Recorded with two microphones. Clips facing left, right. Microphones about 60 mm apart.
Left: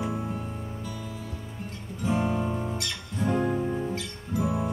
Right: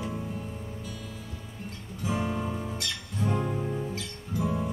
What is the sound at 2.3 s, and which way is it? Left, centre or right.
Music, centre.